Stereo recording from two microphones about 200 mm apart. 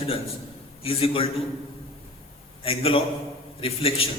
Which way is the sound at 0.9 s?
30° left (ahead or behind).